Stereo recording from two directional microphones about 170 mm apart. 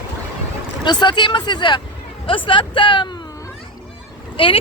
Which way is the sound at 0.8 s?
25° left (ahead or behind).